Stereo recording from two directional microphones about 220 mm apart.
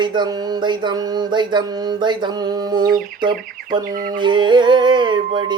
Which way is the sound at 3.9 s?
40° right (ahead or behind).